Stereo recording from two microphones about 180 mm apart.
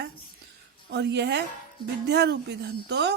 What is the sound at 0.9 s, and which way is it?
Speech, 70° right (ahead or behind).